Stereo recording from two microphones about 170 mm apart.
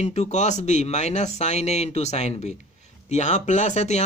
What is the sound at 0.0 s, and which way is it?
Speech, 40° left (ahead or behind).